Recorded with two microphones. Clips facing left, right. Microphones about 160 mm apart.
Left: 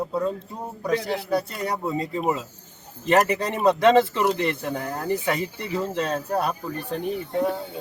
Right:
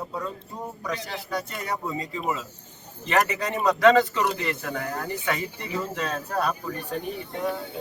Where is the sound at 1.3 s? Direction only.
35° left (ahead or behind).